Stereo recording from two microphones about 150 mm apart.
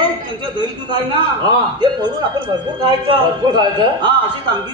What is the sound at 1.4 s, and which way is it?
A man's voice, 30° right (ahead or behind).